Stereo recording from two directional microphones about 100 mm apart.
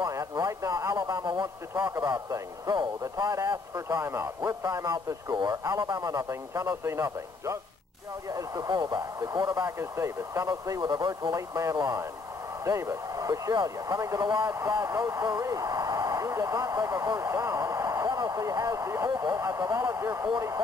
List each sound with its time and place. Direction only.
0.0 s a man's voice: 35° right (ahead or behind)
8.5 s a man's voice: 45° right (ahead or behind)
9.8 s speech: 25° right (ahead or behind)
10.4 s a man's voice: 40° right (ahead or behind)
11.3 s a man's voice: 30° right (ahead or behind)
11.7 s a man's voice: 45° right (ahead or behind)
12.6 s a man's voice: 30° right (ahead or behind)
14.5 s a man's voice: 30° right (ahead or behind)